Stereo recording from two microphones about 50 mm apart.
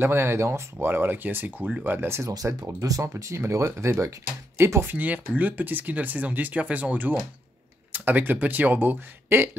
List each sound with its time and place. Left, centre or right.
0.0 s speech: right
0.7 s speech: right
2.0 s speech: right
4.8 s speech: right